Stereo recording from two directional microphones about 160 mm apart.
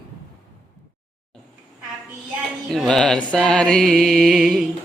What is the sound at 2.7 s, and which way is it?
Mantra, centre (ahead or behind).